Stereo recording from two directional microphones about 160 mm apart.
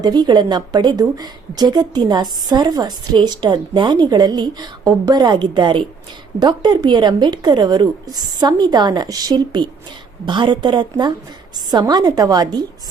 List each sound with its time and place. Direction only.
0.0 s a woman's voice: 25° right (ahead or behind)